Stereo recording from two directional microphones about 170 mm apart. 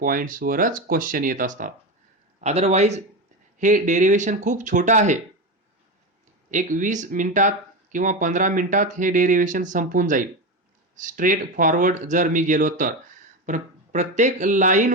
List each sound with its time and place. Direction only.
0.0 s speech: 55° right (ahead or behind)
2.4 s speech: 40° right (ahead or behind)
6.5 s speech: 50° right (ahead or behind)